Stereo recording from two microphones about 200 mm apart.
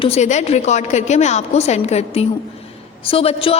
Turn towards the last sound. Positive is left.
turn(degrees=30)  # may be behind; listen again after turning